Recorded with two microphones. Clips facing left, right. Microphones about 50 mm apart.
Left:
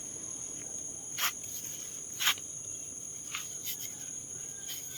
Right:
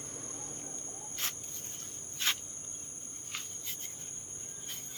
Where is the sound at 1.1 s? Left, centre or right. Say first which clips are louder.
Left 6 dB; left.